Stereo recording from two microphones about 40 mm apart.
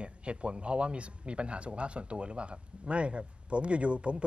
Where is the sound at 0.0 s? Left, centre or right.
Right.